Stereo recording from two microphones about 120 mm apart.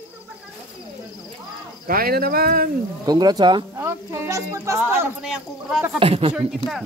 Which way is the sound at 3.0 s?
35° right (ahead or behind).